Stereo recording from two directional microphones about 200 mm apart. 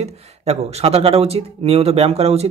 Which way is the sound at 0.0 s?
30° right (ahead or behind).